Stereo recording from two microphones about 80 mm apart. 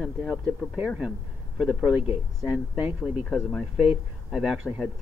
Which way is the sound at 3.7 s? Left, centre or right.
Centre.